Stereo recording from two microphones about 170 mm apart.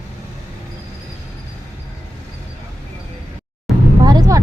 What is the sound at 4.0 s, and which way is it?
Vehicle, 20° right (ahead or behind).